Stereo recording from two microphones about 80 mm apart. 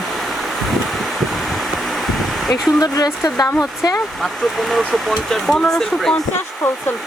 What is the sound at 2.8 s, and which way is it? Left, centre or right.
Speech, left.